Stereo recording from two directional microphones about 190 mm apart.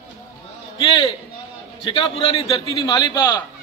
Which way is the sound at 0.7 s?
25° left (ahead or behind).